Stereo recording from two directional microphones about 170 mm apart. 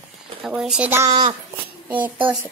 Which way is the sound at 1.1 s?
25° right (ahead or behind).